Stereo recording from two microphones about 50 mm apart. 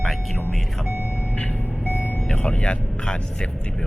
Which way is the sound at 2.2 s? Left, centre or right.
Centre.